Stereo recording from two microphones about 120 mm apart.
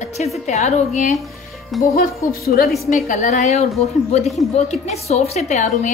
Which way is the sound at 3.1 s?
80° left.